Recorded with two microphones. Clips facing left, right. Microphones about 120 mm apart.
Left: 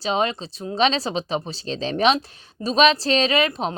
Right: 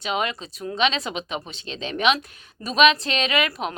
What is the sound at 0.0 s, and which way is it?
A woman's voice, 30° left (ahead or behind).